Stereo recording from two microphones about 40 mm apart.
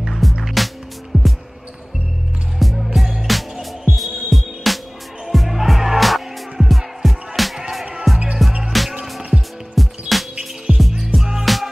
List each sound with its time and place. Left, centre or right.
0.1 s music: centre
1.1 s music: centre
2.6 s music: centre
9.8 s music: centre
11.4 s music: centre